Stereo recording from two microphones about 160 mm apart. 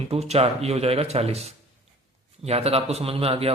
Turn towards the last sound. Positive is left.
turn(degrees=-35)  # may be behind; listen again after turning